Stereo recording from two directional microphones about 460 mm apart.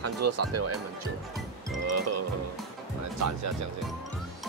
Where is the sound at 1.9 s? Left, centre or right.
Right.